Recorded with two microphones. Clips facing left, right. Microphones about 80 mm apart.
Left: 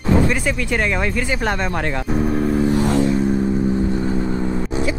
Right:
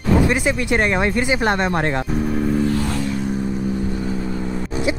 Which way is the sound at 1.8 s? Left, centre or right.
Centre.